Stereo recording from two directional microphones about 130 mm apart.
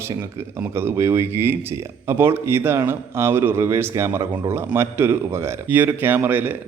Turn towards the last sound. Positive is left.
turn(degrees=-15)  # may be behind; listen again after turning